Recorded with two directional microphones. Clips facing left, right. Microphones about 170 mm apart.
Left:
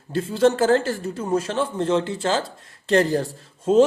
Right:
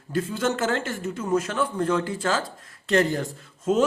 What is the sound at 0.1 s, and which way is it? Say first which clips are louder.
Speech: left 6 dB; 30° left (ahead or behind).